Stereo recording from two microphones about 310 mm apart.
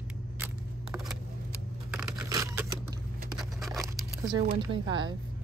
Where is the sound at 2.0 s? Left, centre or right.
Centre.